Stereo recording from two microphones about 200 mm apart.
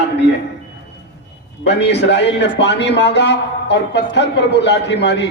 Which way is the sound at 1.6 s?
60° left (ahead or behind).